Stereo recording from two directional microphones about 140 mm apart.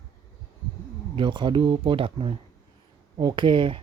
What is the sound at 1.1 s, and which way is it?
Speech, 35° right (ahead or behind).